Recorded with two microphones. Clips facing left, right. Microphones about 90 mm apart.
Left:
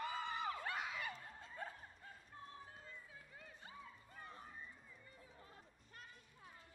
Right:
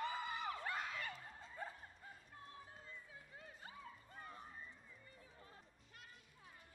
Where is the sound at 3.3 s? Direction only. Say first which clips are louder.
Right 1 dB; 40° right (ahead or behind).